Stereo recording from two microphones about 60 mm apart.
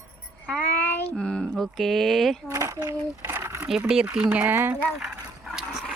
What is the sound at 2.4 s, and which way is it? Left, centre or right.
Speech, right.